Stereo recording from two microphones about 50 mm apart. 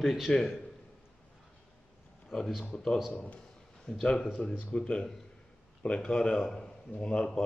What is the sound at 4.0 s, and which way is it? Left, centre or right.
A man's voice, centre.